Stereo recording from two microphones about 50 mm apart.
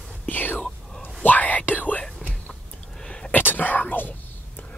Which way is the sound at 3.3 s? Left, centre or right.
Left.